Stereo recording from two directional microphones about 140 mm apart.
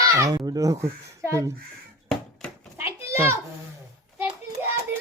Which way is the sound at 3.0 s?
15° right (ahead or behind).